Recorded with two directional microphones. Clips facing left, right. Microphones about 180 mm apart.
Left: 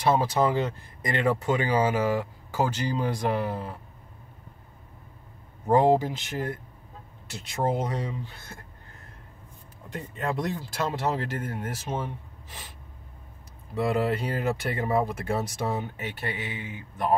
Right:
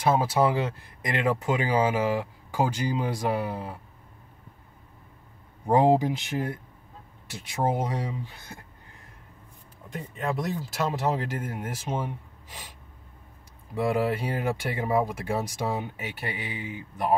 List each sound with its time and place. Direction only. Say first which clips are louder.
0.1 s speech: even; 10° right (ahead or behind)
5.7 s speech: even; 15° right (ahead or behind)
9.9 s speech: even; 5° right (ahead or behind)
13.7 s speech: even; 10° right (ahead or behind)